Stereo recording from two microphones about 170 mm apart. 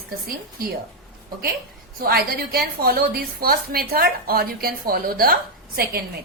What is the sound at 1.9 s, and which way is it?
A woman's voice, 60° right (ahead or behind).